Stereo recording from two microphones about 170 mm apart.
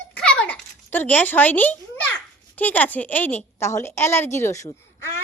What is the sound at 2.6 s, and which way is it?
A woman's voice, 10° left (ahead or behind).